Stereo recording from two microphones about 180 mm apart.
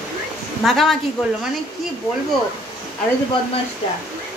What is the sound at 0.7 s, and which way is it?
Speech, centre (ahead or behind).